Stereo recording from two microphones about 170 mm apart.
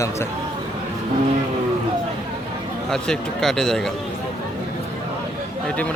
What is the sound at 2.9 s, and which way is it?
Speech, 5° left (ahead or behind).